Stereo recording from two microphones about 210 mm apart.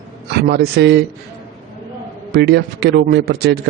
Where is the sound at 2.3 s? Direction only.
50° right (ahead or behind).